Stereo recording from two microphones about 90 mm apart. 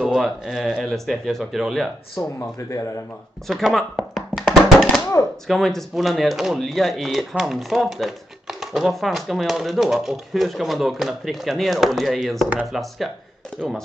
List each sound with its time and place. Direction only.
0.0 s speech: 5° right (ahead or behind)
2.2 s speech: 40° left (ahead or behind)
3.4 s speech: centre (ahead or behind)
4.4 s hands: centre (ahead or behind)
5.5 s speech: centre (ahead or behind)